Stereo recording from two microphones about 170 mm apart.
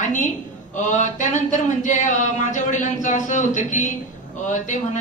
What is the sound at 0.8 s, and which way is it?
Speech, 45° left (ahead or behind).